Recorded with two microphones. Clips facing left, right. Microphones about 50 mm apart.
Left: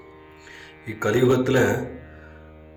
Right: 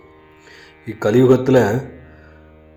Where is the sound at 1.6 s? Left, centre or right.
Left.